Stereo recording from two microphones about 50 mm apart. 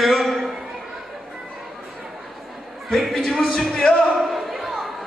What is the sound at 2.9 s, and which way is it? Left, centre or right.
Speech, centre.